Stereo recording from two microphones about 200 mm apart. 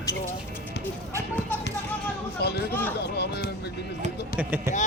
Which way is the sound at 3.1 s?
55° left (ahead or behind).